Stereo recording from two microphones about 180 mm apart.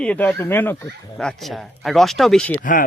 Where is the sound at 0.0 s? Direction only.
10° left (ahead or behind).